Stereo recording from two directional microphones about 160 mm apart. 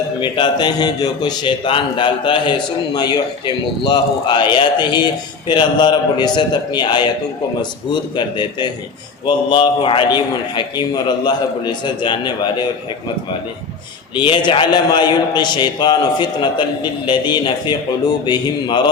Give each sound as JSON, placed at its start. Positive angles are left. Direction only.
{"t": 0.2, "sound": "a man's voice", "side_deg": 30}
{"t": 8.1, "sound": "a man's voice", "side_deg": 30}
{"t": 14.2, "sound": "a man's voice", "side_deg": 30}